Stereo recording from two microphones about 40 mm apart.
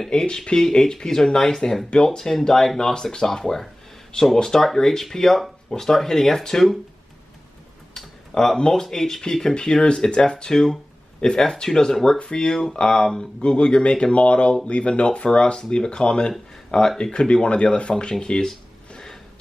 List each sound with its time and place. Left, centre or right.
0.1 s speech: centre
7.9 s tick-tock: centre
8.5 s speech: centre
13.4 s speech: left
16.7 s speech: centre
17.3 s speech: left